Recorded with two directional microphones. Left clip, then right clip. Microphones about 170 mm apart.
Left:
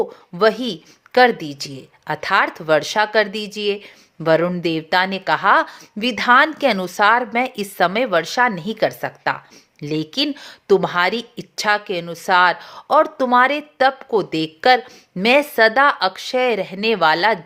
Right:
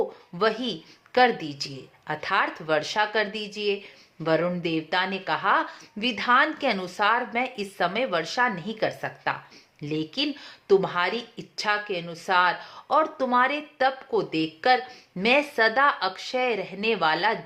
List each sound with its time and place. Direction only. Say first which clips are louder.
0.3 s speech: left 8 dB; 35° left (ahead or behind)